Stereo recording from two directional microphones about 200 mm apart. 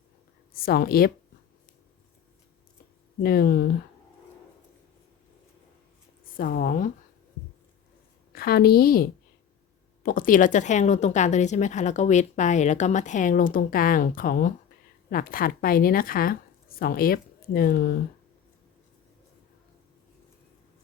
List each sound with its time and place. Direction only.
0.5 s speech: 50° left (ahead or behind)
3.2 s speech: 50° left (ahead or behind)
6.3 s speech: 45° left (ahead or behind)
8.3 s a woman's voice: 50° left (ahead or behind)